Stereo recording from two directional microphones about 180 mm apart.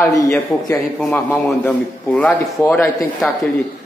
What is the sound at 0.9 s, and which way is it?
A man's voice, centre (ahead or behind).